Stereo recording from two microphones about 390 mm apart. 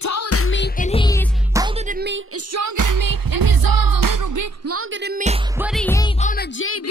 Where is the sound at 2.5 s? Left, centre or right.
Right.